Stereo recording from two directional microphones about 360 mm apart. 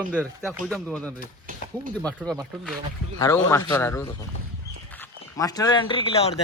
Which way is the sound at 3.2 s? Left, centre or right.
Centre.